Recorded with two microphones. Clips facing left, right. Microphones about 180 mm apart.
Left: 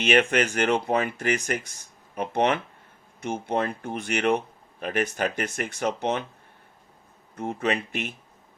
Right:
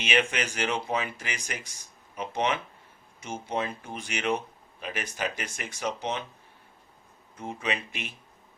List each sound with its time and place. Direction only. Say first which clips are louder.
0.0 s speech: left 6 dB; 55° left (ahead or behind)
7.3 s speech: left 6 dB; 60° left (ahead or behind)